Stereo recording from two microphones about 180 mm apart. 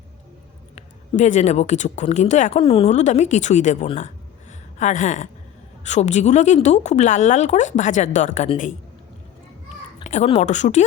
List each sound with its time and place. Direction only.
0.8 s speech: 40° left (ahead or behind)
10.0 s speech: 40° left (ahead or behind)